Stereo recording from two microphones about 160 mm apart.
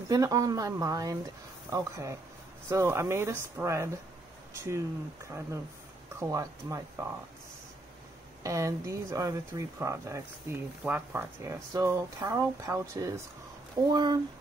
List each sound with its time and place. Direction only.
0.1 s speech: 20° right (ahead or behind)
6.1 s speech: 20° right (ahead or behind)
8.4 s speech: 20° right (ahead or behind)